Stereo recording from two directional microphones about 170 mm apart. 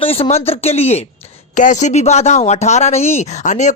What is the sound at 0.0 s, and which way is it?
Speech, 35° left (ahead or behind).